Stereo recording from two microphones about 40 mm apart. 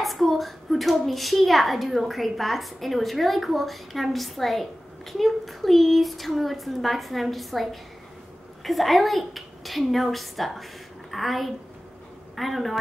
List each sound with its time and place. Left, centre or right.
0.0 s a child's voice: centre